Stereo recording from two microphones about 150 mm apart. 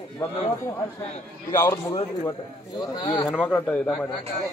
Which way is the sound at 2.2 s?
25° left (ahead or behind).